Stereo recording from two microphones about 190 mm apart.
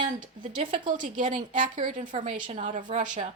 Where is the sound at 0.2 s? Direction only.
45° right (ahead or behind).